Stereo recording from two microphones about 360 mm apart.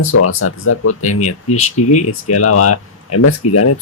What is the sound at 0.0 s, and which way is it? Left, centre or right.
Speech, left.